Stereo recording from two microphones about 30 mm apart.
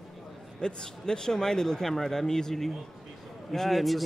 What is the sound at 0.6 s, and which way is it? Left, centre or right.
Speech, left.